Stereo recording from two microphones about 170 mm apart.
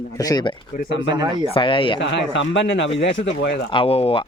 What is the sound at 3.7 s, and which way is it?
Speech, 30° left (ahead or behind).